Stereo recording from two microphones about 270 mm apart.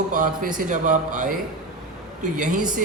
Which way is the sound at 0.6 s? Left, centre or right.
Right.